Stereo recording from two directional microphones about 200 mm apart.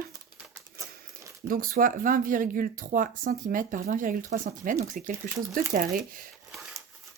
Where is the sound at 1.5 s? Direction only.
45° right (ahead or behind).